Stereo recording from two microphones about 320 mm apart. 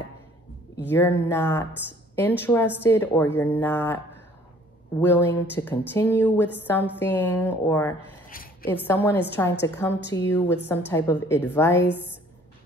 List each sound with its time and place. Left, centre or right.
0.8 s a woman's voice: centre
5.0 s a woman's voice: centre
8.3 s a woman's voice: left
8.8 s a woman's voice: centre